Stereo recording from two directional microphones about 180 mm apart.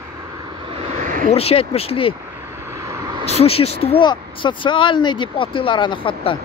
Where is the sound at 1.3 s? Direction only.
35° left (ahead or behind).